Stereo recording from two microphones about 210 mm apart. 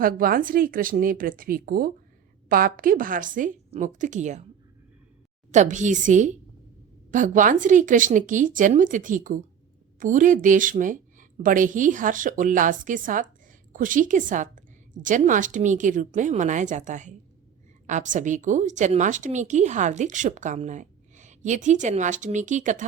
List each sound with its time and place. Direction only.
0.0 s speech: 45° right (ahead or behind)
5.5 s speech: 35° right (ahead or behind)